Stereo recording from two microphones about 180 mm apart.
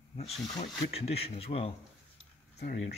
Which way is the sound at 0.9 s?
35° left (ahead or behind).